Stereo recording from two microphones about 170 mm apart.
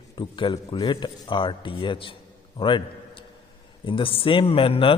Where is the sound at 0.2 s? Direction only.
30° left (ahead or behind).